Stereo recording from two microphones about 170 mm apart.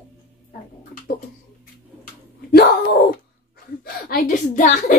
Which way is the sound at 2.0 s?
60° left (ahead or behind).